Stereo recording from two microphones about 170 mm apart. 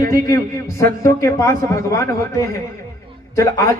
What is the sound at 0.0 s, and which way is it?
A man's voice, 20° left (ahead or behind).